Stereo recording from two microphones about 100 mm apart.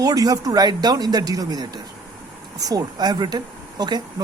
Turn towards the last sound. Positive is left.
turn(degrees=-45)  # may be behind; listen again after turning